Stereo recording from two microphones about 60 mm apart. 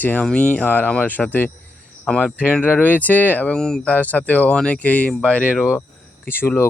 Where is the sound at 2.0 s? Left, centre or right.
Centre.